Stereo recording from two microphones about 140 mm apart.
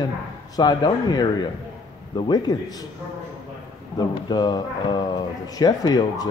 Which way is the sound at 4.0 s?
30° left (ahead or behind).